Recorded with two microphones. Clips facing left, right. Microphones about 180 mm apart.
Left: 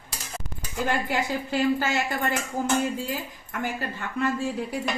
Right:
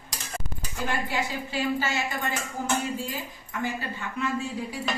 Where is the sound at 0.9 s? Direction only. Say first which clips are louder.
Left 3 dB; 55° left (ahead or behind).